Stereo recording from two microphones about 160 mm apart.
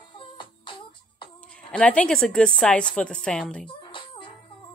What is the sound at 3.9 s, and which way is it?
Music, 30° left (ahead or behind).